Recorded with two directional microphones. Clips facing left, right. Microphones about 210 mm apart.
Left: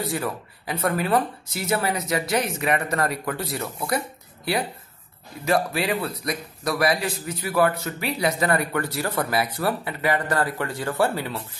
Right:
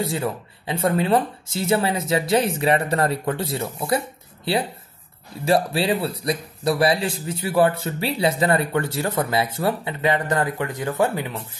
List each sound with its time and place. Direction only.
0.0 s a man's voice: 25° right (ahead or behind)
5.4 s a man's voice: 30° right (ahead or behind)